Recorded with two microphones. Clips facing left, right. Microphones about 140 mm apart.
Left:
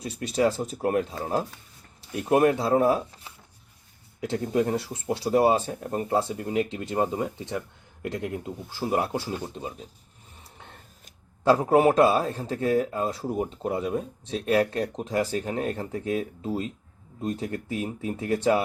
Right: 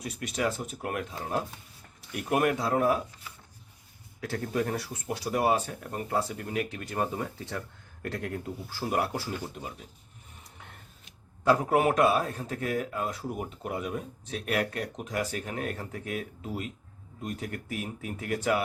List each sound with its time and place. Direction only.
0.0 s a man's voice: 30° left (ahead or behind)
4.2 s a man's voice: 20° left (ahead or behind)
10.4 s vehicle: 30° left (ahead or behind)
11.4 s a man's voice: 30° left (ahead or behind)